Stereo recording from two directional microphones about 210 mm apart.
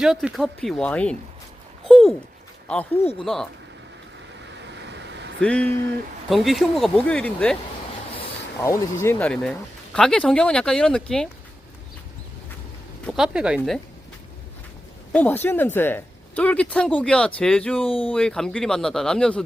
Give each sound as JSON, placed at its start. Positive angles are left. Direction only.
{"t": 0.0, "sound": "speech", "side_deg": 0}
{"t": 1.9, "sound": "dog", "side_deg": 0}
{"t": 2.6, "sound": "speech", "side_deg": 5}
{"t": 4.6, "sound": "vehicle", "side_deg": -55}
{"t": 5.4, "sound": "speech", "side_deg": 5}
{"t": 8.6, "sound": "speech", "side_deg": 15}
{"t": 13.1, "sound": "speech", "side_deg": 0}
{"t": 15.1, "sound": "speech", "side_deg": 10}